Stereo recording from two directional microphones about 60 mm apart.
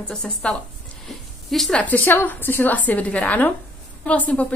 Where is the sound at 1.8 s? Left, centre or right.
Left.